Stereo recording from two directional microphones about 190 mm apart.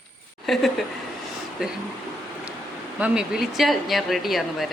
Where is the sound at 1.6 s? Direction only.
5° right (ahead or behind).